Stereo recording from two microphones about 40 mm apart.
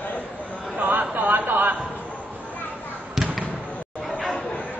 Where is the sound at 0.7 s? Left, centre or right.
Right.